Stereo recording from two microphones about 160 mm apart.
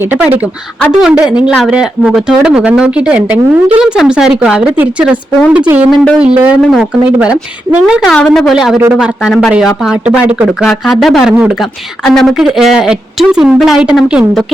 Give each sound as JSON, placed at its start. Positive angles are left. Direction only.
{"t": 0.0, "sound": "speech", "side_deg": -10}